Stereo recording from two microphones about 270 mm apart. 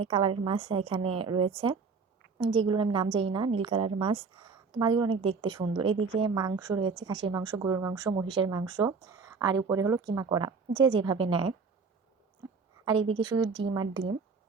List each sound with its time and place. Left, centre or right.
0.0 s a woman's voice: centre
12.8 s speech: centre
13.6 s speech: right